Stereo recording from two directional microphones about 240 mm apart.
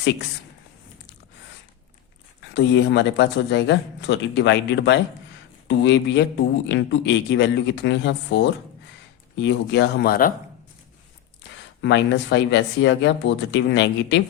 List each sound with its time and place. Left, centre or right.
2.6 s a man's voice: left
11.8 s a man's voice: left